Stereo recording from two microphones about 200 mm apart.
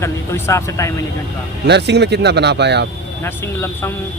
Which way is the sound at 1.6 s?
60° right (ahead or behind).